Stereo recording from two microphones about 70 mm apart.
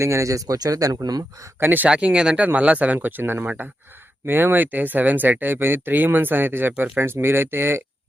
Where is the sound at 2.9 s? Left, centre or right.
Right.